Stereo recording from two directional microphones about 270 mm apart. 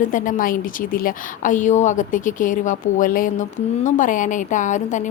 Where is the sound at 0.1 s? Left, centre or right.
Left.